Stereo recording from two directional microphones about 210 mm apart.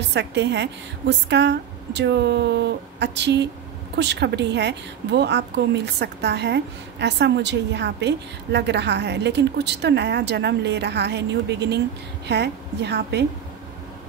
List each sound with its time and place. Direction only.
0.1 s a woman's voice: 55° right (ahead or behind)